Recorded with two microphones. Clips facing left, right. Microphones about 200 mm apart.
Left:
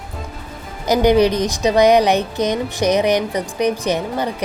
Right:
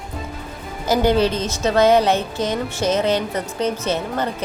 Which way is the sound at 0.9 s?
15° left (ahead or behind).